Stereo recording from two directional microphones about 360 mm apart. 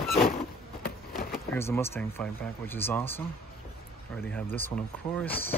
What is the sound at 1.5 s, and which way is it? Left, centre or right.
Speech, centre.